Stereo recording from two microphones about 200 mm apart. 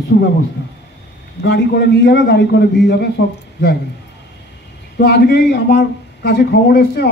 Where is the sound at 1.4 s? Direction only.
55° left (ahead or behind).